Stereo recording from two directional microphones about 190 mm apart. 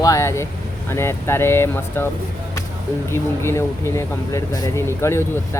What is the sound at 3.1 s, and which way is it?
Speech, 15° left (ahead or behind).